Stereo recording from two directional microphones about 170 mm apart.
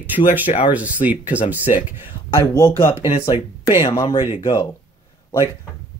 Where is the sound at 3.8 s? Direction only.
25° left (ahead or behind).